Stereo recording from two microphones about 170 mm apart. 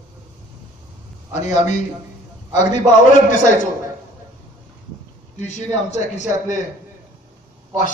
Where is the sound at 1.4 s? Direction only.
40° left (ahead or behind).